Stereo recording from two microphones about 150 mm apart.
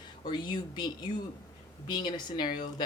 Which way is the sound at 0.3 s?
30° left (ahead or behind).